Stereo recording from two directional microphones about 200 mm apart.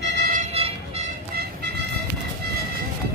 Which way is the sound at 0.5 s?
30° right (ahead or behind).